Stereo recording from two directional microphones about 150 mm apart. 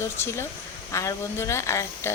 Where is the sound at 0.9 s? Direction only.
20° left (ahead or behind).